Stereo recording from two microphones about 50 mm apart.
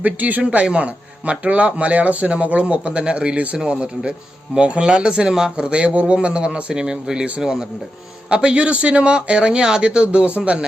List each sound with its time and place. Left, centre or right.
0.0 s speech: right
0.6 s a man's voice: right